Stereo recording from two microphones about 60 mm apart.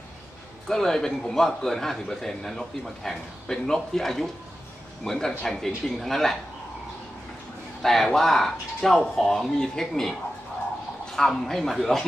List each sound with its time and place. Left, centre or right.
0.7 s a man's voice: centre
7.8 s a man's voice: centre
11.1 s speech: centre